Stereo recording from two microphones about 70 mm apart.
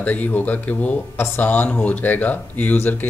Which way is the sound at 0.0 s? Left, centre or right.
Left.